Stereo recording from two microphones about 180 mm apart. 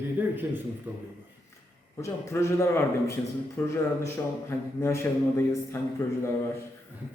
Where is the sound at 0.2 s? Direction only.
10° right (ahead or behind).